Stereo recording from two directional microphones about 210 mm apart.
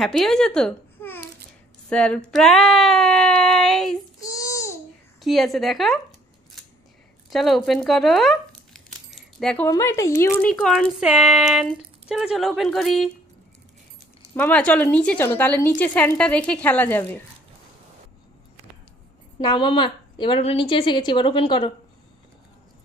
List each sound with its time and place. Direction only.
0.0 s speech: centre (ahead or behind)
4.2 s babbling: 15° left (ahead or behind)
5.2 s speech: centre (ahead or behind)
7.2 s crumpling: centre (ahead or behind)
9.7 s speech: 15° left (ahead or behind)
10.5 s speech: centre (ahead or behind)
14.3 s speech: 5° left (ahead or behind)
19.4 s a woman's voice: 20° left (ahead or behind)